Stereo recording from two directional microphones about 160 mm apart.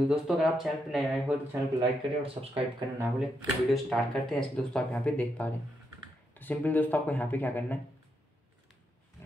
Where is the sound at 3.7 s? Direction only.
Centre (ahead or behind).